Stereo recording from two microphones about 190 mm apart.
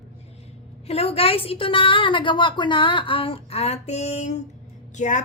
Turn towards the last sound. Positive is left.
turn(degrees=40)  # may be behind; listen again after turning